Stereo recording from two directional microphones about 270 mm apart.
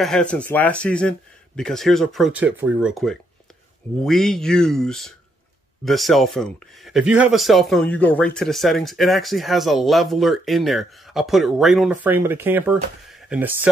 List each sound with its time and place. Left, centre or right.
0.0 s speech: centre